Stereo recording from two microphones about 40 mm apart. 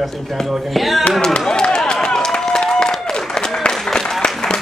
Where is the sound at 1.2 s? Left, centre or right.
Centre.